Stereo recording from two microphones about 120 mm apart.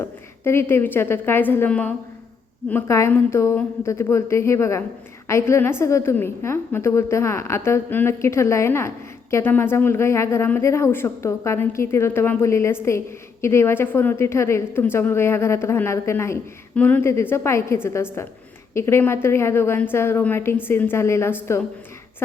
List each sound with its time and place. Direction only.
0.0 s speech: 20° left (ahead or behind)
2.8 s speech: 25° left (ahead or behind)